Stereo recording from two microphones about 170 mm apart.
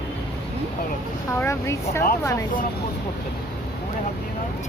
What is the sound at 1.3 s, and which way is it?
Speech, 15° left (ahead or behind).